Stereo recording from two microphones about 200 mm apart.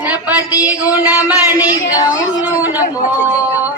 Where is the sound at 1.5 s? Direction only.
20° left (ahead or behind).